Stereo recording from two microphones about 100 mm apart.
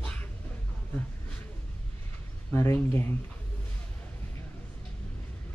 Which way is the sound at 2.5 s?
25° left (ahead or behind).